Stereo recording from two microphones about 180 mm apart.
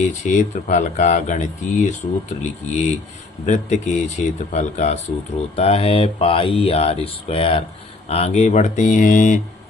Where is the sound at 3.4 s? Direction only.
45° left (ahead or behind).